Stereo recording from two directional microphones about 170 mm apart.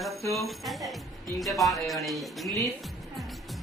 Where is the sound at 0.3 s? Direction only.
Centre (ahead or behind).